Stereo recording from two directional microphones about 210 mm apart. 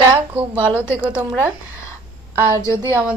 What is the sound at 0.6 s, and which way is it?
A woman's voice, 5° right (ahead or behind).